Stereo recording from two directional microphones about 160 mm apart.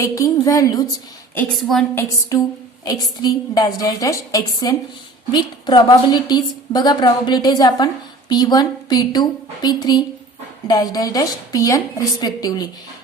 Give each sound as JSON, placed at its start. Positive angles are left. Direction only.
{"t": 0.0, "sound": "a woman's voice", "side_deg": 20}
{"t": 1.5, "sound": "a woman's voice", "side_deg": 0}
{"t": 2.3, "sound": "a woman's voice", "side_deg": 20}